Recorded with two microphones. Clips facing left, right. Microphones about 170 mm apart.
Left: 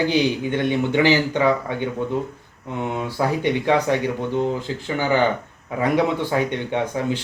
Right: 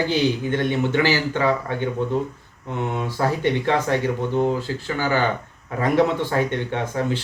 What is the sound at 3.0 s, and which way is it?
Speech, 15° left (ahead or behind).